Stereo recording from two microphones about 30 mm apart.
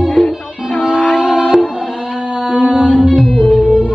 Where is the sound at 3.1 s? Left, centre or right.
Right.